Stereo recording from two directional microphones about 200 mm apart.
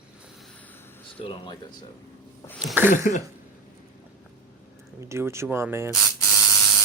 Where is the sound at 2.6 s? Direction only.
10° right (ahead or behind).